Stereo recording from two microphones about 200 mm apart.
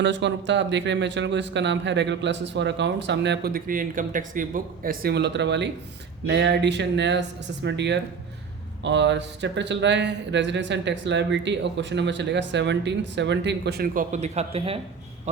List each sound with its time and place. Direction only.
0.0 s speech: 60° right (ahead or behind); by 14.8 s 30° right (ahead or behind)